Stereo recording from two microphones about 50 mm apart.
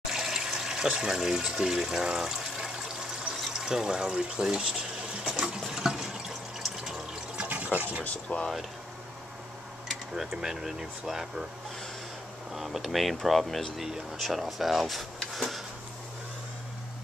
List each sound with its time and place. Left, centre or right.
0.0 s water: centre
0.9 s speech: centre
5.4 s water: centre
7.4 s fill: right
8.0 s speech: left
10.3 s speech: centre
12.5 s speech: centre
13.8 s speech: centre